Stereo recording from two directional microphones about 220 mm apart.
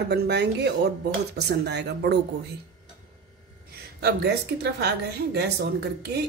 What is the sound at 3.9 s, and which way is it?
A woman's voice, 50° right (ahead or behind).